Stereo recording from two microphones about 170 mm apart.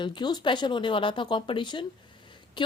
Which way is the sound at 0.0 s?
25° left (ahead or behind).